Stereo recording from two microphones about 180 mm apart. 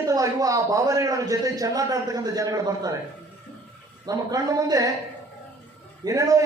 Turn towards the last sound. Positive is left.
turn(degrees=-20)  # may be behind; listen again after turning